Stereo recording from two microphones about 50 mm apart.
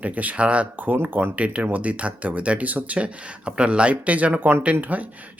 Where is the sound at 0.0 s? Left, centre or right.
Right.